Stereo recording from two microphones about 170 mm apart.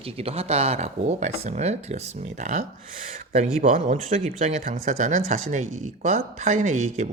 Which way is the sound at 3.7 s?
50° right (ahead or behind).